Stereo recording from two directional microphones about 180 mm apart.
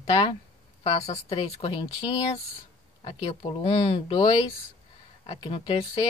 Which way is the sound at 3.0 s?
30° left (ahead or behind).